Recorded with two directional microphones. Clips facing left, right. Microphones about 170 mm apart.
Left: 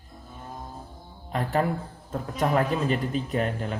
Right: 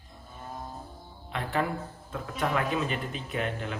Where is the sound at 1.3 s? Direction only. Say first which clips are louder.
Left 4 dB; 40° left (ahead or behind).